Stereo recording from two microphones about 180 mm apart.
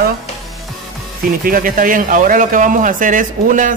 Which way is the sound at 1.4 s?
50° right (ahead or behind).